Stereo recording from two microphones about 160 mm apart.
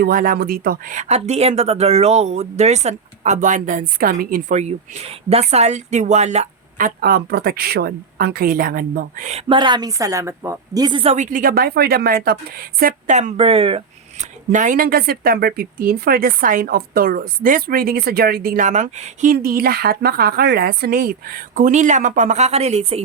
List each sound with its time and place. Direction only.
0.0 s speech: 60° right (ahead or behind); by 6.5 s 45° right (ahead or behind)
6.7 s a woman's voice: 65° right (ahead or behind)
9.5 s a woman's voice: 30° right (ahead or behind)
11.1 s a woman's voice: 50° right (ahead or behind)
13.1 s speech: 40° right (ahead or behind)